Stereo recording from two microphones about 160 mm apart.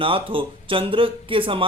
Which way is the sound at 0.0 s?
35° right (ahead or behind).